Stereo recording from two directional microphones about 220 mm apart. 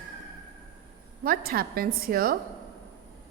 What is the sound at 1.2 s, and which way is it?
A woman's voice, 40° right (ahead or behind).